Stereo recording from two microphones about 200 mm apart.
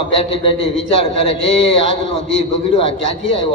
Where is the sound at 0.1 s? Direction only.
30° left (ahead or behind).